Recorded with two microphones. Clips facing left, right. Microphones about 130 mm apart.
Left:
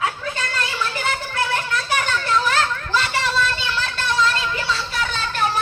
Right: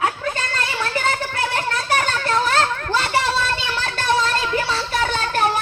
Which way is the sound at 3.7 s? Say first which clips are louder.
Right 3 dB; 50° right (ahead or behind).